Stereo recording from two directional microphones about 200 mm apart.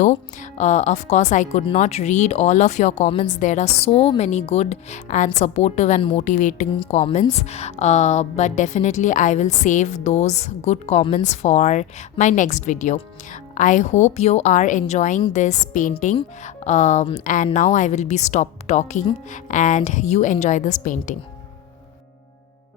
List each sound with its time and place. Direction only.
0.0 s a woman's voice: 35° left (ahead or behind)